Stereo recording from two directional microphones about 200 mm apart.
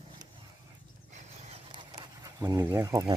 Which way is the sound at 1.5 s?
25° right (ahead or behind).